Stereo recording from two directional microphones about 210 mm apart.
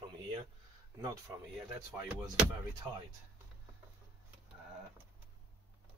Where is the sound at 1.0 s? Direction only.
15° right (ahead or behind).